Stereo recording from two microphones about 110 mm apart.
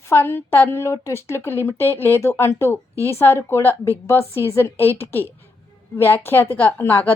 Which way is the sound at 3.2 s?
20° left (ahead or behind).